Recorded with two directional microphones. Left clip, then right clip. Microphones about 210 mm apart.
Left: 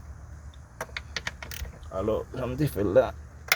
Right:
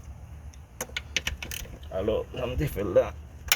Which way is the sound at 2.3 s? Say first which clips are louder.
Left 1 dB; 50° left (ahead or behind).